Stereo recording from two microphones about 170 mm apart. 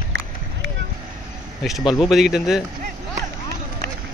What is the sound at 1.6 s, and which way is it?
Speech, centre (ahead or behind).